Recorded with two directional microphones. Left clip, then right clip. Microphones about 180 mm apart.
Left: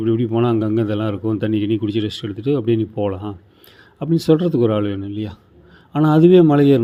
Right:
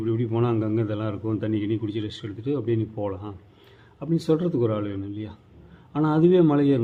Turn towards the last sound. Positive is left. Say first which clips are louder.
# left 8 dB
turn(degrees=25)  # may be behind; listen again after turning